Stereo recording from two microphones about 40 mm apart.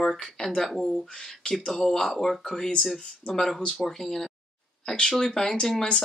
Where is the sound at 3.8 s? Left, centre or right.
Centre.